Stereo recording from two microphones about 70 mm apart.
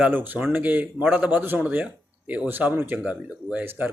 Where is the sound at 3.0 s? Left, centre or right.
Centre.